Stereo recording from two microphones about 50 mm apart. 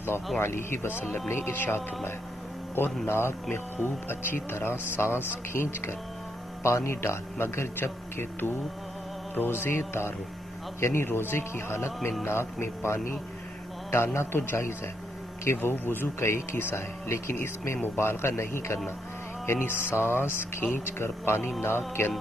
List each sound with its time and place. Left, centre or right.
0.4 s speech: left
3.1 s a man's voice: left
6.6 s a man's voice: left
11.1 s speech: left
12.3 s a man's voice: left
16.2 s a man's voice: left